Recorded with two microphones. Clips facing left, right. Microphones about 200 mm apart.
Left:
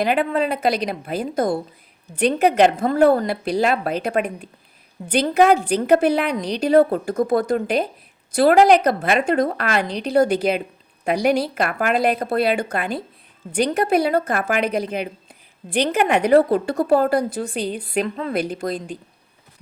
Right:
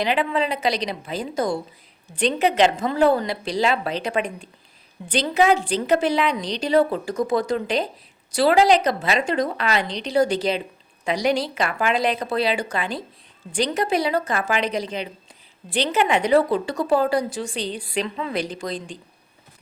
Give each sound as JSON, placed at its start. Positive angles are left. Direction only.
{"t": 0.0, "sound": "a woman's voice", "side_deg": 55}
{"t": 6.4, "sound": "speech", "side_deg": 10}
{"t": 6.7, "sound": "a woman's voice", "side_deg": 55}
{"t": 9.8, "sound": "speech", "side_deg": 10}
{"t": 10.1, "sound": "a woman's voice", "side_deg": 55}